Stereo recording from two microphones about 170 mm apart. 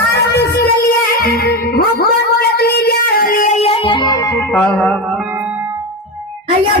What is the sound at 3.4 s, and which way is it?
Music, 40° left (ahead or behind).